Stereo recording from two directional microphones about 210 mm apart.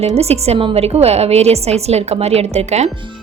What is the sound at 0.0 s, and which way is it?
Speech, 30° right (ahead or behind).